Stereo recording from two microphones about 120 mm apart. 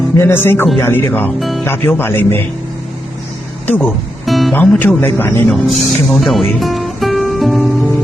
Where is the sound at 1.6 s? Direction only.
20° left (ahead or behind).